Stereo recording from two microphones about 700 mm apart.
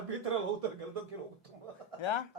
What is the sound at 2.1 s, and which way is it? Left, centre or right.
Speech, left.